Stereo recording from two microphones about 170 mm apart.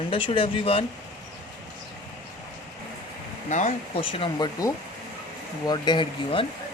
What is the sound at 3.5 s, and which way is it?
Speech, 45° left (ahead or behind).